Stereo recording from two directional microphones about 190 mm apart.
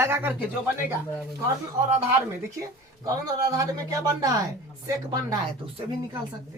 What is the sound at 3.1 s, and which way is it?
Speech, 20° right (ahead or behind).